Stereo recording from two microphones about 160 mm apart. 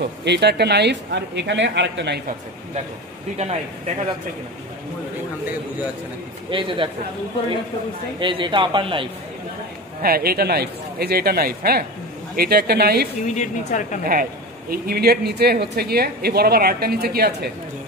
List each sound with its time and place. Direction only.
0.0 s speech: 90° right
3.3 s speech: 45° right (ahead or behind)
6.5 s a man's voice: 30° right (ahead or behind)
8.2 s a man's voice: 30° right (ahead or behind)
10.0 s a woman's voice: 70° right (ahead or behind)
13.2 s a woman's voice: 50° left (ahead or behind)
14.7 s a woman's voice: 70° right (ahead or behind)